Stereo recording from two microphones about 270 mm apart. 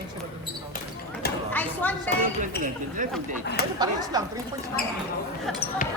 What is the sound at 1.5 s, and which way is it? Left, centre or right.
Speech, centre.